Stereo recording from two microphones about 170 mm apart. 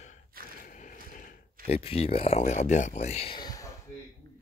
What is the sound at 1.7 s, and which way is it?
Speech, 35° left (ahead or behind).